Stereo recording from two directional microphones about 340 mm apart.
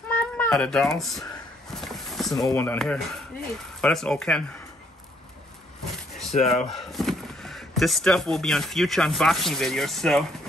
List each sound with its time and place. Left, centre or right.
0.1 s a child's voice: centre
6.3 s speech: centre
6.8 s speech: centre